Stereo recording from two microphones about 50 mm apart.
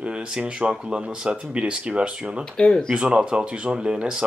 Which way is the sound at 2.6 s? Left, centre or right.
Left.